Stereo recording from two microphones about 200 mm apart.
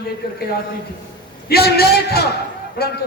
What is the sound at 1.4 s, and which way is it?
Speech, 50° left (ahead or behind).